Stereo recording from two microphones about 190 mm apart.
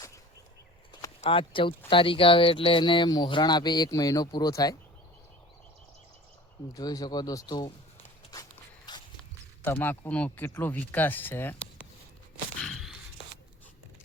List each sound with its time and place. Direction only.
1.2 s speech: 30° left (ahead or behind)
6.7 s speech: 20° left (ahead or behind)
8.9 s walk: 20° left (ahead or behind)
9.6 s speech: 10° left (ahead or behind)
12.6 s a sound: centre (ahead or behind)
13.2 s a sound: 70° left (ahead or behind)